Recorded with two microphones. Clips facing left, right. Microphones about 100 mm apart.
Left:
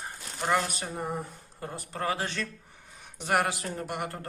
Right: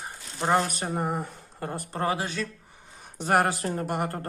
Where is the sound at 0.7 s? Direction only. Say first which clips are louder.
Right 5 dB; 50° right (ahead or behind).